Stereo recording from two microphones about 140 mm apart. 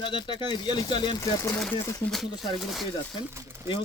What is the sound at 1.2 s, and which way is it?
Speech, 20° left (ahead or behind).